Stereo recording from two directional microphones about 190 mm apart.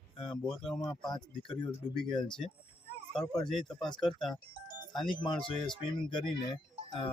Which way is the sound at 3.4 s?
Centre (ahead or behind).